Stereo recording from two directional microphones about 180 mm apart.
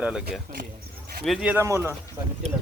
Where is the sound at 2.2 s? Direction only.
25° right (ahead or behind).